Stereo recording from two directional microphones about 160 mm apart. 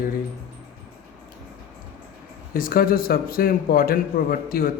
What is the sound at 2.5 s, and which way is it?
A man's voice, 65° left (ahead or behind).